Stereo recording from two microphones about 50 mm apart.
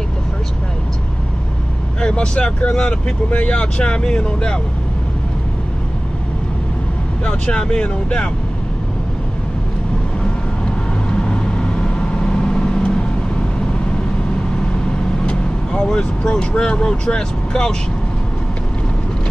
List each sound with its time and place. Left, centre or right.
2.0 s speech: centre
7.2 s speech: centre
11.1 s vehicle: centre
15.2 s speech: centre